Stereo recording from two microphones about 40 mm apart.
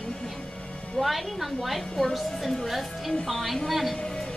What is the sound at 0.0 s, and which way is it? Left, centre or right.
Music, centre.